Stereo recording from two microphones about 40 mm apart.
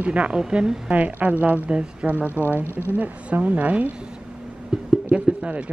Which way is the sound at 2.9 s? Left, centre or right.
Right.